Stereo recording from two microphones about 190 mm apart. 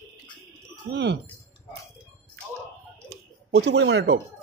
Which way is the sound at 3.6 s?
70° right (ahead or behind).